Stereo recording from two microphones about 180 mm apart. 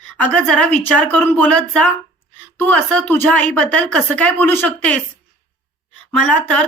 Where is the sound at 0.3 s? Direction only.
5° left (ahead or behind).